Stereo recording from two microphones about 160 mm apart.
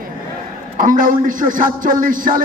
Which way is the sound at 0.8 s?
55° right (ahead or behind).